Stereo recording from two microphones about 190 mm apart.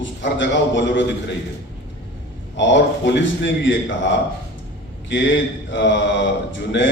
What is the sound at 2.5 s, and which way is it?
Speech, 70° left (ahead or behind).